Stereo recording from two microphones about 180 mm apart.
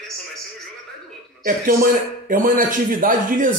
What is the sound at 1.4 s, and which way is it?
Speech, 50° right (ahead or behind).